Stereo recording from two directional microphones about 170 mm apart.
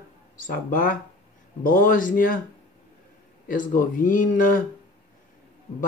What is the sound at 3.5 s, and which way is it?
Speech, 55° left (ahead or behind).